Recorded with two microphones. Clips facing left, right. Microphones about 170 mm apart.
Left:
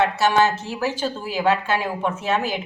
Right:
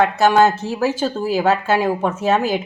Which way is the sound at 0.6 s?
40° right (ahead or behind).